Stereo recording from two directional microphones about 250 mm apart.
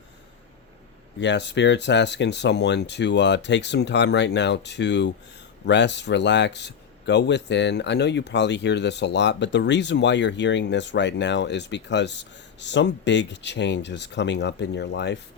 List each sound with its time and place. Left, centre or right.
1.2 s speech: left